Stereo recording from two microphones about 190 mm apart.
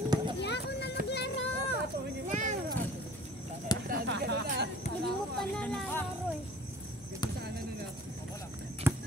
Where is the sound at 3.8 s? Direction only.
60° right (ahead or behind).